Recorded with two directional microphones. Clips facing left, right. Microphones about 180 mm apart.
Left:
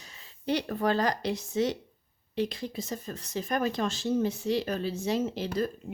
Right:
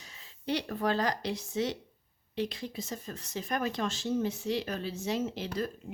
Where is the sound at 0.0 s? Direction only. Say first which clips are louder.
Left 3 dB; 45° left (ahead or behind).